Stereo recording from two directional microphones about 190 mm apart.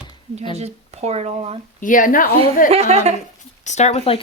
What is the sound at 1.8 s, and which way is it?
Speech, 45° left (ahead or behind).